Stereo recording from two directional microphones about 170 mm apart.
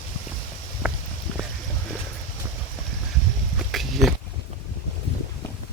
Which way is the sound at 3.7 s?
Centre (ahead or behind).